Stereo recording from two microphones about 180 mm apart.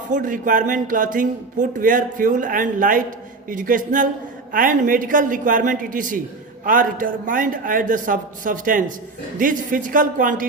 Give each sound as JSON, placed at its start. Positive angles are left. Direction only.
{"t": 0.1, "sound": "speech", "side_deg": -45}